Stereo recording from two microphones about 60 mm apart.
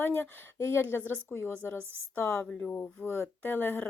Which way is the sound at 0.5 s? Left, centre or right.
Left.